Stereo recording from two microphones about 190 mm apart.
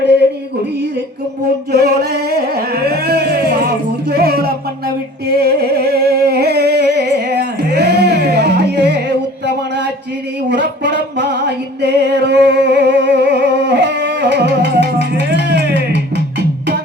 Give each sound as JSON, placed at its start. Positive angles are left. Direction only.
{"t": 1.7, "sound": "music", "side_deg": -55}
{"t": 10.5, "sound": "music", "side_deg": -65}